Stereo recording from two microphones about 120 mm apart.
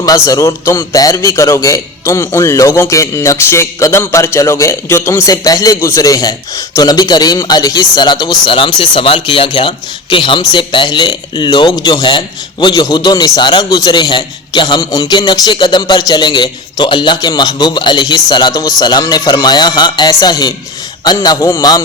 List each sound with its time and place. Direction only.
0.0 s a man's voice: 30° left (ahead or behind)